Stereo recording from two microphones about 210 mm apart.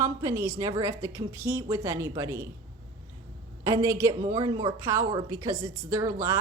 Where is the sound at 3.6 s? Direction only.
15° right (ahead or behind).